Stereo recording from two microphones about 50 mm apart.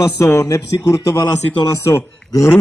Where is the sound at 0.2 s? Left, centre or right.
Left.